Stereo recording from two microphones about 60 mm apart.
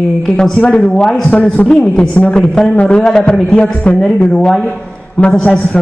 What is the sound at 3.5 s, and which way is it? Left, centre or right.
Speech, centre.